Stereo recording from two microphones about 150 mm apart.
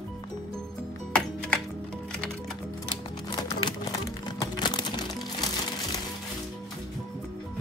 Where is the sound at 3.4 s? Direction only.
25° left (ahead or behind).